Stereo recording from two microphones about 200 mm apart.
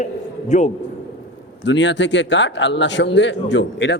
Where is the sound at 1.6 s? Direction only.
65° left (ahead or behind).